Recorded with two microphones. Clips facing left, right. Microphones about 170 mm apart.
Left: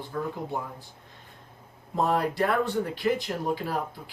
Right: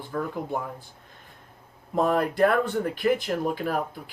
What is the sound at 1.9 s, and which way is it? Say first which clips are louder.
Speech: right 2 dB; 50° right (ahead or behind).